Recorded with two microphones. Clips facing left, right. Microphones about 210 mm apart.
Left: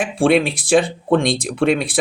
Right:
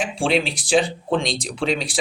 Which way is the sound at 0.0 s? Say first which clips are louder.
Left 6 dB; 55° left (ahead or behind).